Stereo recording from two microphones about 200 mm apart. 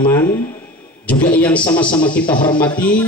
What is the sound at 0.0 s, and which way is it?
Speech, 15° left (ahead or behind).